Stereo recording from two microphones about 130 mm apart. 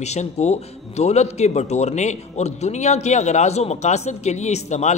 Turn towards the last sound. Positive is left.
turn(degrees=60)  # may be behind; listen again after turning